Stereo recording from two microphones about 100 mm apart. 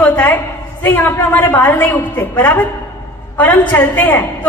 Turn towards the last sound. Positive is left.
turn(degrees=20)  # may be behind; listen again after turning